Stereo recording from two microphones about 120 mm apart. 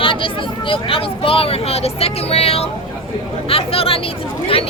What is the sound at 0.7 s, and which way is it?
Speech, 50° left (ahead or behind).